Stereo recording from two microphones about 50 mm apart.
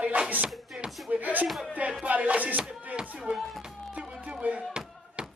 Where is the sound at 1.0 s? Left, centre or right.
Right.